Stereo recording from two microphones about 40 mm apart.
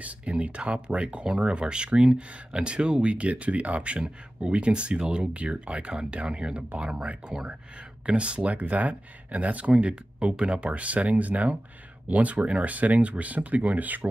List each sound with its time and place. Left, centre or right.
0.0 s speech: right
8.0 s speech: right